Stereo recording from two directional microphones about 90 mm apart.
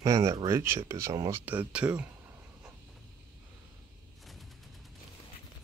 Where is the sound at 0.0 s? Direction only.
40° right (ahead or behind).